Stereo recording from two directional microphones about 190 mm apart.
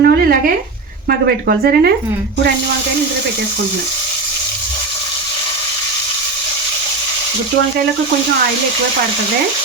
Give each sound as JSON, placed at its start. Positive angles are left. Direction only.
{"t": 0.0, "sound": "speech", "side_deg": -50}